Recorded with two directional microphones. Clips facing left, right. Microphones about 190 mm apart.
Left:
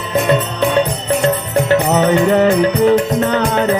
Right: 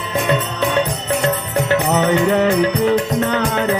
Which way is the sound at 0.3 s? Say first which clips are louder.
Left 3 dB; 30° left (ahead or behind).